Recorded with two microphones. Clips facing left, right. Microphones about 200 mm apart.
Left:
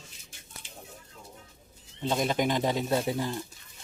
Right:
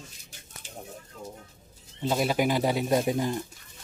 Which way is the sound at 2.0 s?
5° right (ahead or behind).